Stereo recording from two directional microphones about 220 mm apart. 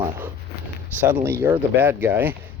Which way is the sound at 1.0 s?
10° right (ahead or behind).